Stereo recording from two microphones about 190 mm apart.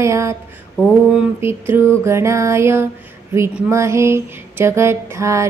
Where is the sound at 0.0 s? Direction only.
15° right (ahead or behind).